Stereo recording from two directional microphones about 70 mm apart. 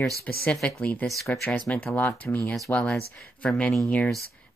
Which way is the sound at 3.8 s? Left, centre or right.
Centre.